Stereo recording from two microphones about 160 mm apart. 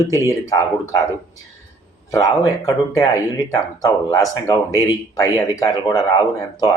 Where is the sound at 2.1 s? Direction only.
20° left (ahead or behind).